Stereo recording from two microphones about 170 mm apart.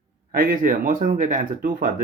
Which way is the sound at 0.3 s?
55° right (ahead or behind).